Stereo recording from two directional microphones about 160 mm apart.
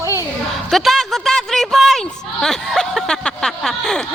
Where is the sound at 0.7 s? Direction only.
Centre (ahead or behind).